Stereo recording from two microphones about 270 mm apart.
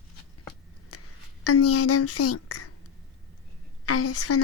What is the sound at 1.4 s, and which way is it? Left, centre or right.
Speech, left.